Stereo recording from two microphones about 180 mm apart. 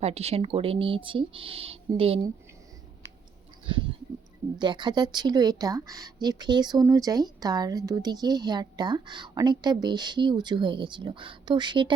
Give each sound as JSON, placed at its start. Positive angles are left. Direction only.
{"t": 0.0, "sound": "speech", "side_deg": -35}
{"t": 4.5, "sound": "speech", "side_deg": -25}